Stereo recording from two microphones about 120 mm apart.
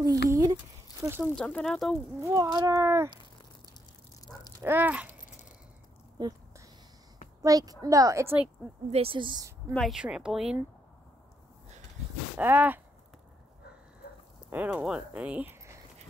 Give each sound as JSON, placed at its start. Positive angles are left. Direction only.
{"t": 0.0, "sound": "speech", "side_deg": -30}
{"t": 1.2, "sound": "speech", "side_deg": 10}
{"t": 2.2, "sound": "speech", "side_deg": -30}
{"t": 4.3, "sound": "a sound", "side_deg": 5}
{"t": 4.6, "sound": "speech", "side_deg": -15}
{"t": 7.4, "sound": "a woman's voice", "side_deg": -30}
{"t": 8.9, "sound": "speech", "side_deg": -50}
{"t": 9.8, "sound": "speech", "side_deg": -5}
{"t": 12.4, "sound": "speech", "side_deg": -15}
{"t": 14.5, "sound": "speech", "side_deg": -15}